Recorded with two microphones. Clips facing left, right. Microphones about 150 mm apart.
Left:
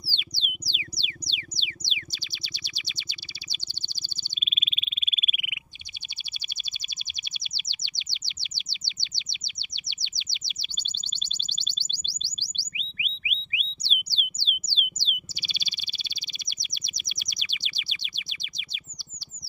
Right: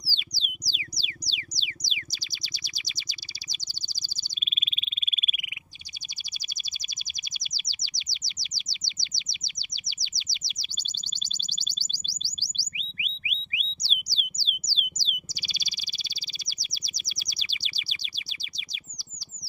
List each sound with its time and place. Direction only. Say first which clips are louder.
0.0 s music: left 2 dB; 40° right (ahead or behind)
7.5 s chirp: left 1 dB; 40° right (ahead or behind)
11.5 s music: left 1 dB; 40° right (ahead or behind)
16.4 s bird: left 1 dB; 35° right (ahead or behind)